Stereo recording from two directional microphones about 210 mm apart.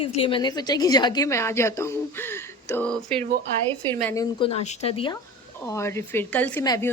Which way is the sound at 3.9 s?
15° left (ahead or behind).